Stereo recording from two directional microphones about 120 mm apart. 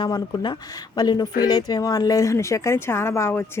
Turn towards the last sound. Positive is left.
turn(degrees=20)  # may be behind; listen again after turning